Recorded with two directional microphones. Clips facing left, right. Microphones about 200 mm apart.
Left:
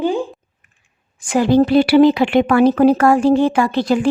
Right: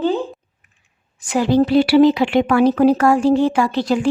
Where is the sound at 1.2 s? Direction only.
50° left (ahead or behind).